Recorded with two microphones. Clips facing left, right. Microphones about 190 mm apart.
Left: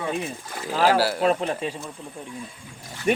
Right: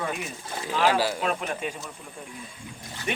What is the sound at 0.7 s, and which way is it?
Speech, 40° left (ahead or behind).